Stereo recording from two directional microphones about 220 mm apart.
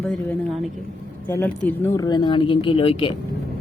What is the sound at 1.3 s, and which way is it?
Speech, 10° left (ahead or behind).